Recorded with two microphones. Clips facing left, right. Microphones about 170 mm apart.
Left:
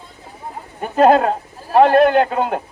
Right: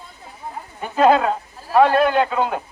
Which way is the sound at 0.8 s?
50° left (ahead or behind).